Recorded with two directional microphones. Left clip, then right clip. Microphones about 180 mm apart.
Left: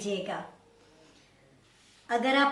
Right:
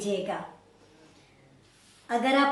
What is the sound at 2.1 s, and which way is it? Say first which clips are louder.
Speech: right 1 dB; 5° left (ahead or behind).